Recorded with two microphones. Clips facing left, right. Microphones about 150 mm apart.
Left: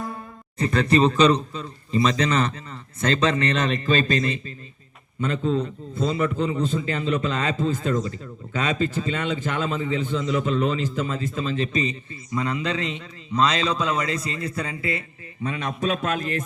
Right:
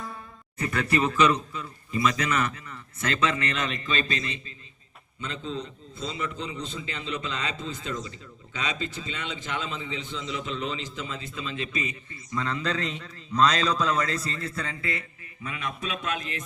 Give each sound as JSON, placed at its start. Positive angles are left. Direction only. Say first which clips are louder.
{"t": 0.0, "sound": "a sound", "louder": "left 6 dB", "side_deg": 50}
{"t": 0.6, "sound": "a man's voice", "louder": "left 7 dB", "side_deg": 30}
{"t": 12.3, "sound": "a man's voice", "louder": "left 4 dB", "side_deg": 15}
{"t": 14.5, "sound": "a man's voice", "louder": "left 5 dB", "side_deg": 20}
{"t": 15.4, "sound": "a man's voice", "louder": "left 8 dB", "side_deg": 40}